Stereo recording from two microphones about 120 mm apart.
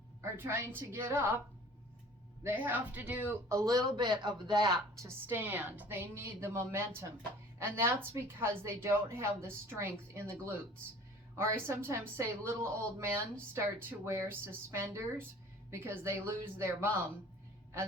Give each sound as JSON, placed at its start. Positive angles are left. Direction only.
{"t": 0.2, "sound": "a woman's voice", "side_deg": -20}
{"t": 2.4, "sound": "a woman's voice", "side_deg": -15}
{"t": 3.5, "sound": "a woman's voice", "side_deg": -25}
{"t": 5.0, "sound": "a woman's voice", "side_deg": -20}